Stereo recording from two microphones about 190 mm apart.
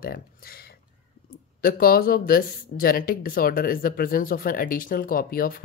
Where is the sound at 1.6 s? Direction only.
50° left (ahead or behind).